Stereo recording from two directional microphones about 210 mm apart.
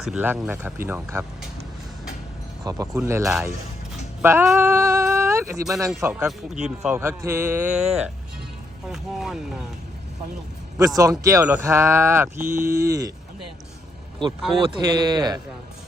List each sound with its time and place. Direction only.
0.0 s speech: 5° right (ahead or behind)
2.6 s speech: 15° right (ahead or behind)
8.9 s speech: centre (ahead or behind)
10.8 s speech: 15° right (ahead or behind)
14.6 s speech: 20° right (ahead or behind)